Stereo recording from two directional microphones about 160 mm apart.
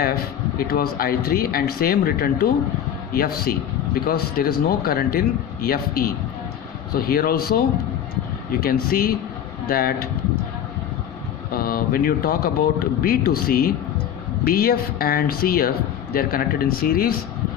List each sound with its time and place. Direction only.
0.6 s speech: 70° left (ahead or behind)
8.6 s speech: 70° left (ahead or behind)
11.5 s speech: 65° left (ahead or behind)